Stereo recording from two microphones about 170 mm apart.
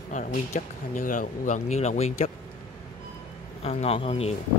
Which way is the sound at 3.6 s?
35° left (ahead or behind).